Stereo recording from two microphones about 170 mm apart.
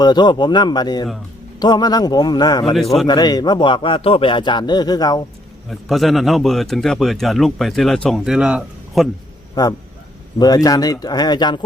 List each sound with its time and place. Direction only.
0.0 s a man's voice: 25° left (ahead or behind)
5.9 s speech: centre (ahead or behind)
9.6 s a man's voice: 20° left (ahead or behind)